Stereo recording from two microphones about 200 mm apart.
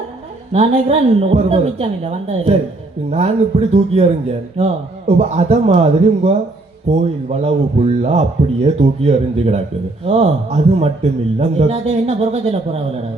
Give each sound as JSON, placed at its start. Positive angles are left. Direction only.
{"t": 0.5, "sound": "a man's voice", "side_deg": -30}